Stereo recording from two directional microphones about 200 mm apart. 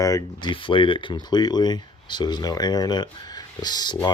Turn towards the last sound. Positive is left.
turn(degrees=20)  # may be behind; listen again after turning